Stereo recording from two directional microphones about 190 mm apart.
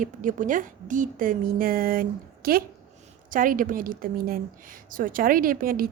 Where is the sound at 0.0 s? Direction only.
45° right (ahead or behind).